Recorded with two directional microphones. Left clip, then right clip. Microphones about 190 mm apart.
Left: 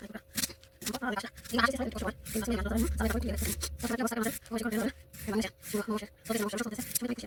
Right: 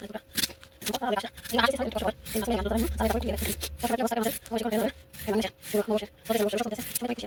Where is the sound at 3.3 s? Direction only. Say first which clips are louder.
Right 5 dB; 10° left (ahead or behind).